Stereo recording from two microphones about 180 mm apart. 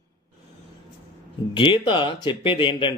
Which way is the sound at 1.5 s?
25° left (ahead or behind).